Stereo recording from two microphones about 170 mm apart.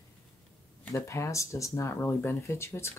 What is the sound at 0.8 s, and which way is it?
Speech, 15° left (ahead or behind).